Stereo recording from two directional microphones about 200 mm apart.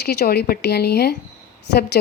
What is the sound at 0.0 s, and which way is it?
A woman's voice, 55° left (ahead or behind).